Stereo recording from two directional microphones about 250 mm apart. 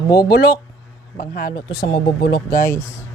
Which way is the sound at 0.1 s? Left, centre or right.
Left.